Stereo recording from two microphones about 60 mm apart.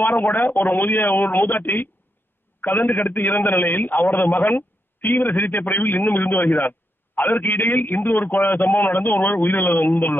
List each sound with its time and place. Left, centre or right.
0.0 s a man's voice: left